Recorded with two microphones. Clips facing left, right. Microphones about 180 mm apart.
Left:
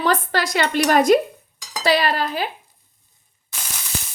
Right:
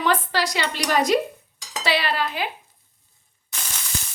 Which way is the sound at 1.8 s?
40° left (ahead or behind).